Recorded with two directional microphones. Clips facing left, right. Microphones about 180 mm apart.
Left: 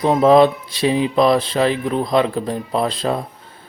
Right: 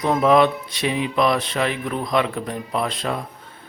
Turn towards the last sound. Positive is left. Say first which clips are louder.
# left 5 dB
turn(degrees=30)  # may be behind; listen again after turning